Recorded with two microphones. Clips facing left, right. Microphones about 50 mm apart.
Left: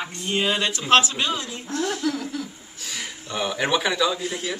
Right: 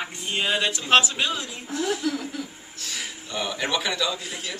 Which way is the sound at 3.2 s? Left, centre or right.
Centre.